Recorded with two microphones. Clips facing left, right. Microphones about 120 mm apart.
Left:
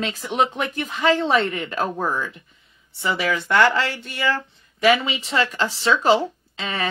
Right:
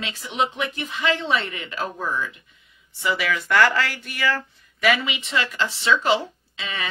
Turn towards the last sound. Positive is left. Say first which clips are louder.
# left 5 dB
turn(degrees=35)  # may be behind; listen again after turning